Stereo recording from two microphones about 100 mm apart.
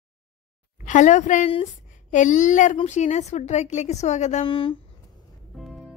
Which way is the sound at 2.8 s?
90° left.